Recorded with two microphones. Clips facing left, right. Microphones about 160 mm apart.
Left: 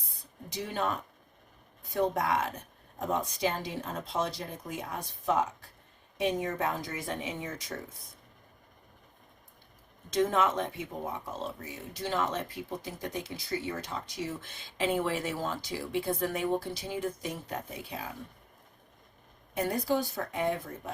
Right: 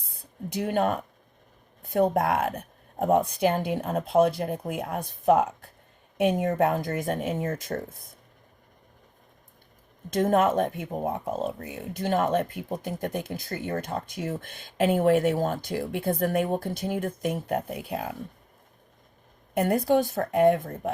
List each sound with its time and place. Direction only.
0.5 s speech: 60° right (ahead or behind)
10.1 s speech: 50° right (ahead or behind)
19.5 s speech: 60° right (ahead or behind)